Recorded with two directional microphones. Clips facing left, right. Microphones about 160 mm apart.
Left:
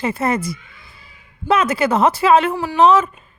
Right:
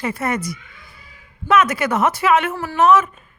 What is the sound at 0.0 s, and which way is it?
Speech, 30° left (ahead or behind).